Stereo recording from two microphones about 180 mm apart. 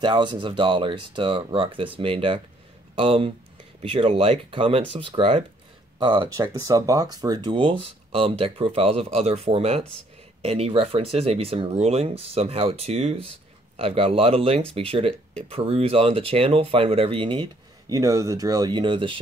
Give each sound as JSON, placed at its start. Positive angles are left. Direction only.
{"t": 0.0, "sound": "speech", "side_deg": -25}